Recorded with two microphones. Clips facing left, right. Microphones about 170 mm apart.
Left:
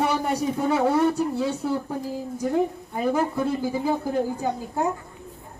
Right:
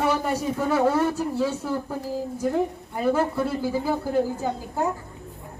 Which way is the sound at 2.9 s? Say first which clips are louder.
Right 1 dB; 15° left (ahead or behind).